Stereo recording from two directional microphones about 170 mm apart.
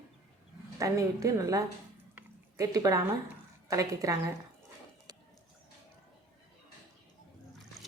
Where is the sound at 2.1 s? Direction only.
20° right (ahead or behind).